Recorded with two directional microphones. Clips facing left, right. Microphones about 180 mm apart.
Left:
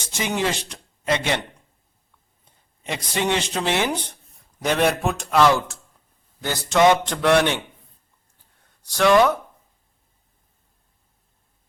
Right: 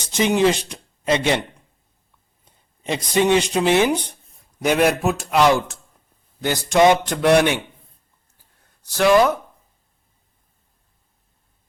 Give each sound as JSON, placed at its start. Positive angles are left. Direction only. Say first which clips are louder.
{"t": 0.1, "sound": "speech", "louder": "right 7 dB", "side_deg": -20}
{"t": 2.4, "sound": "speech", "louder": "right 6 dB", "side_deg": -20}
{"t": 5.3, "sound": "speech", "louder": "right 1 dB", "side_deg": -15}
{"t": 8.9, "sound": "speech", "louder": "right 1 dB", "side_deg": -5}